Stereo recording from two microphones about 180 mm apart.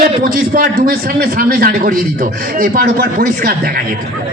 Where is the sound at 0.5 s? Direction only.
55° right (ahead or behind).